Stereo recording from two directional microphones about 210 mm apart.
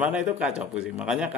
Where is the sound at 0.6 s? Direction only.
5° right (ahead or behind).